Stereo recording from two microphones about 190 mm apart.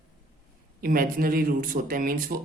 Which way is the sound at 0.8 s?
50° right (ahead or behind).